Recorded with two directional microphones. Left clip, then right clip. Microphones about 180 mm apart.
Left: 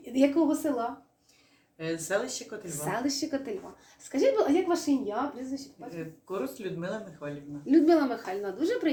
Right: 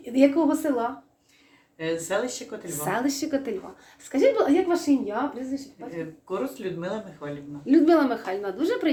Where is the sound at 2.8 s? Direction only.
25° right (ahead or behind).